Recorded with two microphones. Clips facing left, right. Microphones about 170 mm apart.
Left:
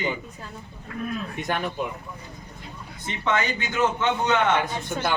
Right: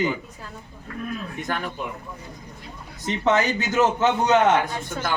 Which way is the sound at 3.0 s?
40° right (ahead or behind).